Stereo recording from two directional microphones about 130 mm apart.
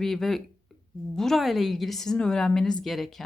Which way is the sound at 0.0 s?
Centre (ahead or behind).